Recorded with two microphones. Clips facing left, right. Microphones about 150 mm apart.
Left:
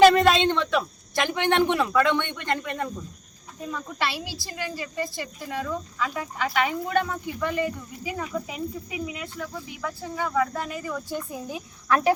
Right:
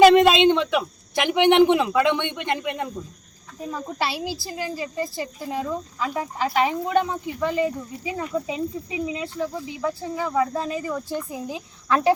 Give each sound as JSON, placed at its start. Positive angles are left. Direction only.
{"t": 0.0, "sound": "a man's voice", "side_deg": -15}
{"t": 3.6, "sound": "speech", "side_deg": -30}